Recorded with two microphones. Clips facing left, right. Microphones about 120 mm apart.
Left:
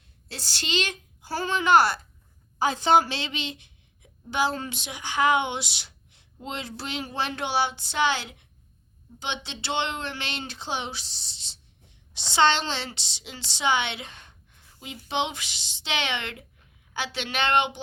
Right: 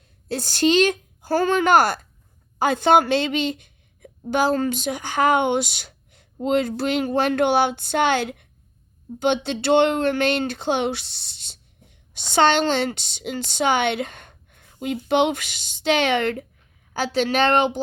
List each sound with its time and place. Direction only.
0.3 s a woman's voice: 50° right (ahead or behind)